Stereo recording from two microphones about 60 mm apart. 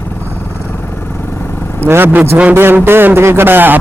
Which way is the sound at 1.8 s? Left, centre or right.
Right.